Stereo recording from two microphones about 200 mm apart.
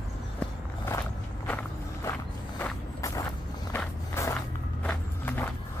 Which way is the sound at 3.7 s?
10° left (ahead or behind).